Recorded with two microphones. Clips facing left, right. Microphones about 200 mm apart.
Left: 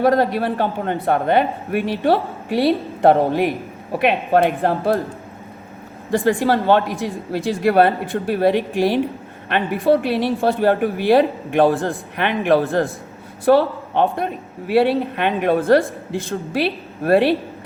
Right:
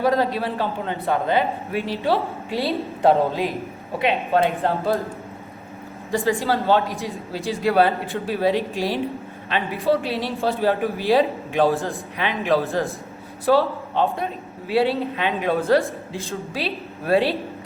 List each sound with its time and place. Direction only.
0.0 s speech: 55° left (ahead or behind)
6.1 s speech: 55° left (ahead or behind)